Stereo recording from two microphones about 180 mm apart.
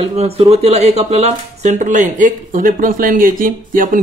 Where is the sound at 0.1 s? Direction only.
35° right (ahead or behind).